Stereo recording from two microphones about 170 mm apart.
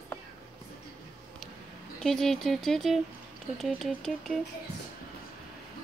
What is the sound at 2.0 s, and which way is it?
Speech, centre (ahead or behind).